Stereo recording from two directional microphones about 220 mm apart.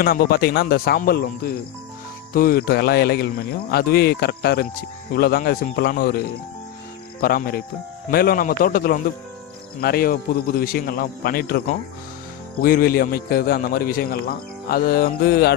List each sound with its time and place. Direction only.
0.0 s a man's voice: 45° left (ahead or behind)
12.6 s a man's voice: 40° left (ahead or behind)